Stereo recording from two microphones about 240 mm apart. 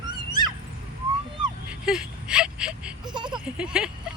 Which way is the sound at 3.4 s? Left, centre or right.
Centre.